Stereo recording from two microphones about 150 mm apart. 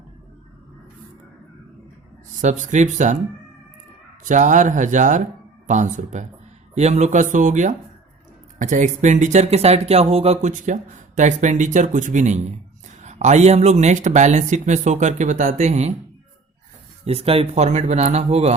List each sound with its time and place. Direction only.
2.4 s speech: 55° right (ahead or behind)
4.2 s speech: 60° right (ahead or behind)
17.1 s speech: 40° right (ahead or behind)